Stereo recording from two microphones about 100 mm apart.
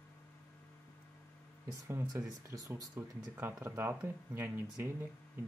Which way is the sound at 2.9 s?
25° right (ahead or behind).